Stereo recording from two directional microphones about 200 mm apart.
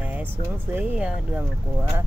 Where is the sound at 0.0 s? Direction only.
10° right (ahead or behind).